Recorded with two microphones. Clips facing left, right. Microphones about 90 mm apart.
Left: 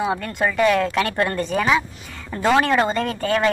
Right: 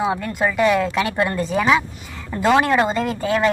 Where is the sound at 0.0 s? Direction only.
5° right (ahead or behind).